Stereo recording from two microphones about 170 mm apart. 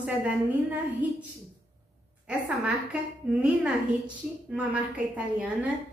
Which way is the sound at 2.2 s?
5° right (ahead or behind).